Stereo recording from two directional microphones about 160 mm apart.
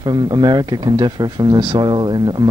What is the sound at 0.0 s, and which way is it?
Speech, 25° right (ahead or behind).